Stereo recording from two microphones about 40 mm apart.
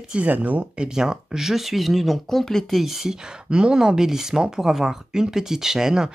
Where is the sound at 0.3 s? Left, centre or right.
Right.